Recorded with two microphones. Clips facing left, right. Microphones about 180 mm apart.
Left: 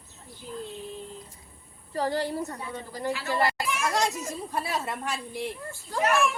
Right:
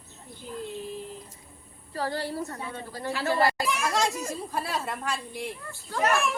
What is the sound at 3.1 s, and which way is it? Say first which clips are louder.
Speech: right 3 dB; 40° right (ahead or behind).